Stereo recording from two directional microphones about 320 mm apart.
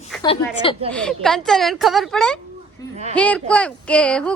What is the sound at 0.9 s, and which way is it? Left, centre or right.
Speech, centre.